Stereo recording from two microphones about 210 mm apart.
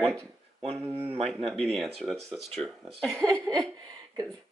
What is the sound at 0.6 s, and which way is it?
Speech, 30° right (ahead or behind).